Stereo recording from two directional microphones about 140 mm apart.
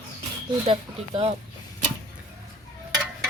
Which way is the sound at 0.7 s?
45° right (ahead or behind).